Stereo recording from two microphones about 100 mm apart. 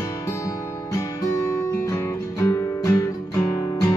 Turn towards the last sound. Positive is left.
turn(degrees=35)  # may be behind; listen again after turning